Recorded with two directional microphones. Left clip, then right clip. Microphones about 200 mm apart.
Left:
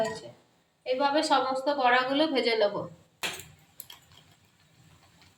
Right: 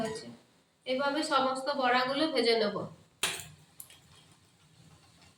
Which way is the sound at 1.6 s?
55° left (ahead or behind).